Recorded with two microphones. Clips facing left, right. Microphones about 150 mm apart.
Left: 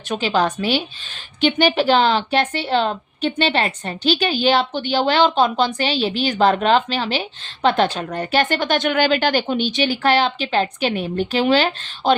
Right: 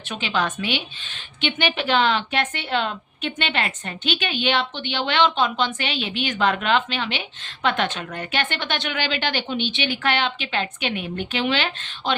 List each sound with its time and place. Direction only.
0.1 s a woman's voice: 35° left (ahead or behind)